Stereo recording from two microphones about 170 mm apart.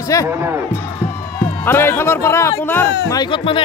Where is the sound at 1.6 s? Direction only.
15° left (ahead or behind).